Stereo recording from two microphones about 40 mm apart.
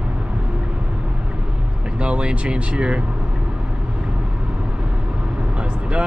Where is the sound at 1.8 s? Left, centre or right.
Right.